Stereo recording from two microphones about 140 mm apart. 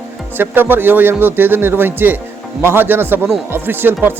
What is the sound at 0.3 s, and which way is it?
Speech, 15° right (ahead or behind).